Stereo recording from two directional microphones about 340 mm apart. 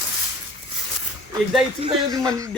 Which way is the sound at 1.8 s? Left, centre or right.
Centre.